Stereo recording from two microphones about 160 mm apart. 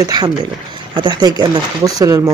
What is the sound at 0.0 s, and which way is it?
Speech, 25° right (ahead or behind).